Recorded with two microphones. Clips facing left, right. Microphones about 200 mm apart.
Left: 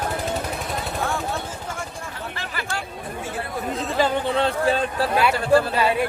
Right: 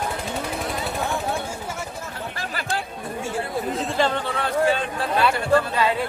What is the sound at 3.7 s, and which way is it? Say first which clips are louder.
Chatter: left 2 dB; centre (ahead or behind).